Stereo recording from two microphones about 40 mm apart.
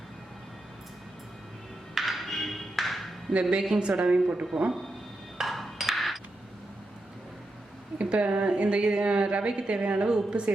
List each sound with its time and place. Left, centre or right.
2.0 s music: centre
3.6 s a woman's voice: right
4.5 s speech: centre
5.4 s ping: centre
7.9 s a sound: right
8.3 s a woman's voice: right